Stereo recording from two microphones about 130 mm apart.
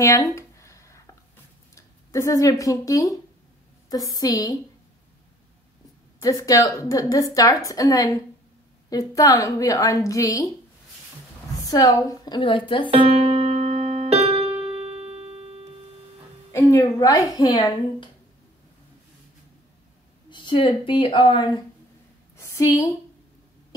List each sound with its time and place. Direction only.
0.0 s a sound: 25° left (ahead or behind)
2.6 s a woman's voice: 25° left (ahead or behind)
6.2 s a woman's voice: 25° left (ahead or behind)
11.6 s a woman's voice: 25° left (ahead or behind)
12.4 s a woman's voice: 40° left (ahead or behind)
12.9 s music: 45° right (ahead or behind)
16.5 s a woman's voice: 25° left (ahead or behind)
20.2 s speech: 40° left (ahead or behind)
22.4 s a sound: 25° left (ahead or behind)